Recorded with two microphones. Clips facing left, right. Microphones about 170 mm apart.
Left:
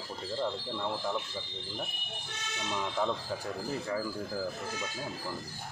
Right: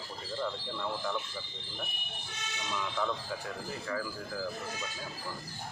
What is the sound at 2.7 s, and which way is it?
Speech, 30° left (ahead or behind).